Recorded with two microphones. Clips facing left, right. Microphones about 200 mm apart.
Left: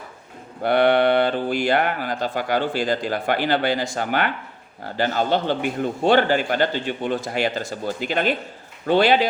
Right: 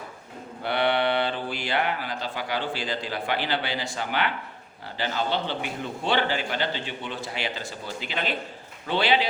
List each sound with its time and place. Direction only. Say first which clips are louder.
0.6 s speech: left 7 dB; 50° left (ahead or behind)